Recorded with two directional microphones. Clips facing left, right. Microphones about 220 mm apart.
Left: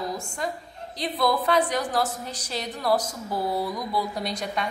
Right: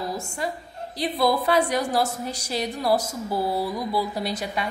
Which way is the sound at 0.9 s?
10° right (ahead or behind).